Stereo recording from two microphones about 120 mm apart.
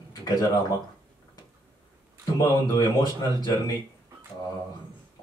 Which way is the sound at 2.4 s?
35° left (ahead or behind).